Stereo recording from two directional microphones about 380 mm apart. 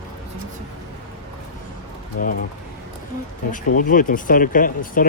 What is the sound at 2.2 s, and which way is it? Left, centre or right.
Speech, left.